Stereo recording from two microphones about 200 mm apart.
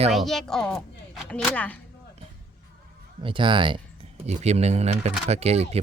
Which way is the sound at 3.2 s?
25° right (ahead or behind).